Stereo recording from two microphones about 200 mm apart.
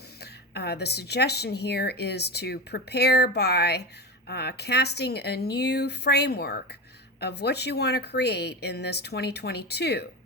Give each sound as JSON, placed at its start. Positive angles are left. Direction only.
{"t": 0.2, "sound": "a woman's voice", "side_deg": 55}